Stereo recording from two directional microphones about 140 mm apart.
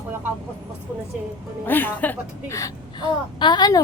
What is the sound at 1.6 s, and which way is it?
Speech, 15° left (ahead or behind).